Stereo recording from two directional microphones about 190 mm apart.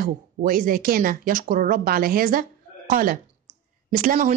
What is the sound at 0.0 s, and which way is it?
Speech, 45° right (ahead or behind).